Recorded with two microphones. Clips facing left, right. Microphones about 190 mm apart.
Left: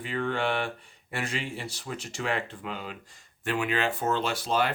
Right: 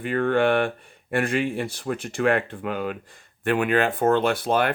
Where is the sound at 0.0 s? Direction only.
55° right (ahead or behind).